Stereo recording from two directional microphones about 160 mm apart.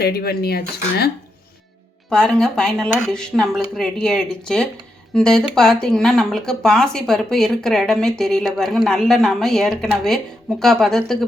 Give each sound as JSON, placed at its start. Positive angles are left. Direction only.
{"t": 0.0, "sound": "speech", "side_deg": 75}
{"t": 2.0, "sound": "speech", "side_deg": 5}